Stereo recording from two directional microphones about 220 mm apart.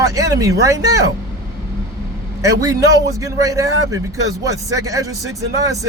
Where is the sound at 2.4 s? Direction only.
15° right (ahead or behind).